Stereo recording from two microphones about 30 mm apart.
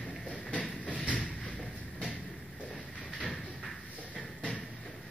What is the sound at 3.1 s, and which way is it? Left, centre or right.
Music, left.